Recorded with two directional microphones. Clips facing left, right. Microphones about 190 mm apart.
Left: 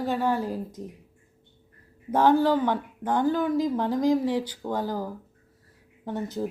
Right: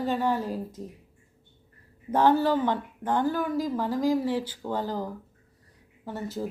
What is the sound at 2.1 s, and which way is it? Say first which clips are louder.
Speech: left 2 dB; 10° left (ahead or behind).